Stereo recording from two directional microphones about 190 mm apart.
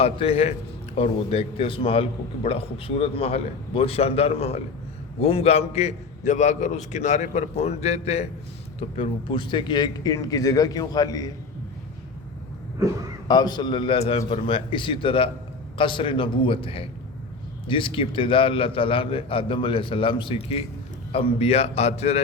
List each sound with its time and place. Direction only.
0.0 s a man's voice: 30° left (ahead or behind)
13.2 s a man's voice: 20° left (ahead or behind)